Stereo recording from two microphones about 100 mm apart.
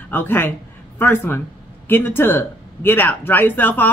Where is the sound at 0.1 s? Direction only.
20° left (ahead or behind).